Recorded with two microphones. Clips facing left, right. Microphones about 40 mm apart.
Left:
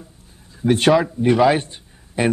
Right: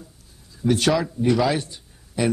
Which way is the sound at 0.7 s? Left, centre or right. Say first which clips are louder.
Left 5 dB; left.